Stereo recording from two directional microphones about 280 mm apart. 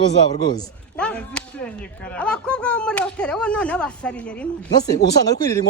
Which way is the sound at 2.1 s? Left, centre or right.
Centre.